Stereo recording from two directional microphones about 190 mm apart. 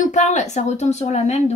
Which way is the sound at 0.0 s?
40° left (ahead or behind).